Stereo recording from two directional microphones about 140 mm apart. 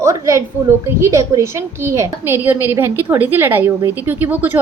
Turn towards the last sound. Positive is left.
turn(degrees=-15)  # may be behind; listen again after turning